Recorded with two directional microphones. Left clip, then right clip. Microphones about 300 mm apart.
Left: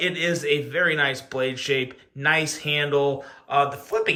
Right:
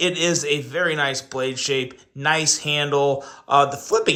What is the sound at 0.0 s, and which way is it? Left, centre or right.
A man's voice, centre.